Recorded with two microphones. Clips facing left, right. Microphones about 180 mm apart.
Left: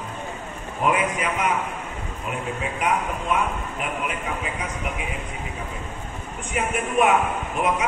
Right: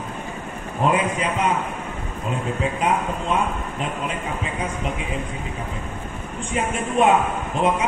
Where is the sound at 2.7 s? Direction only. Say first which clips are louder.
Right 2 dB; 25° right (ahead or behind).